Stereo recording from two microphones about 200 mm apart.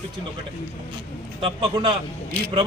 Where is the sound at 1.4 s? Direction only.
25° right (ahead or behind).